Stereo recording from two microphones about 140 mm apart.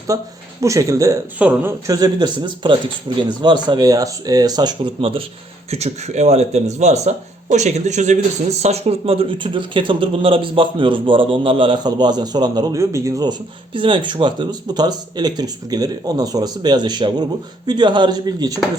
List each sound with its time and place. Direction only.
0.1 s speech: 25° right (ahead or behind)
1.4 s a man's voice: 10° right (ahead or behind)
1.9 s speech: 25° right (ahead or behind)
5.7 s speech: 50° right (ahead or behind); by 13.3 s 25° right (ahead or behind)
13.7 s speech: 35° right (ahead or behind)